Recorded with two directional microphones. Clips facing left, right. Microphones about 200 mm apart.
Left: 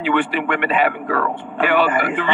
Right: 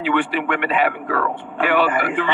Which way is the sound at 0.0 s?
20° left (ahead or behind).